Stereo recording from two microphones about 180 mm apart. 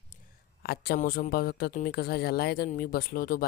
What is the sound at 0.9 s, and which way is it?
Speech, 50° left (ahead or behind).